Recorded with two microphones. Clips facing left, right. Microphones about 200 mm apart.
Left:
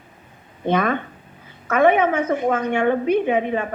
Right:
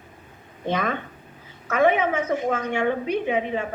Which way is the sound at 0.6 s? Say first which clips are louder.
Left 5 dB; 55° left (ahead or behind).